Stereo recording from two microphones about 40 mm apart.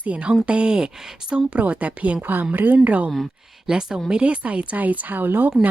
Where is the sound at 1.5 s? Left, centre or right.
Right.